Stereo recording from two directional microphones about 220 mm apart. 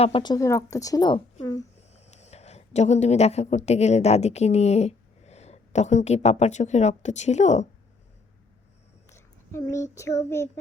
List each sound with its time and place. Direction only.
0.0 s a woman's voice: 20° left (ahead or behind)
1.9 s speech: 30° left (ahead or behind)
9.0 s a child's voice: 10° left (ahead or behind)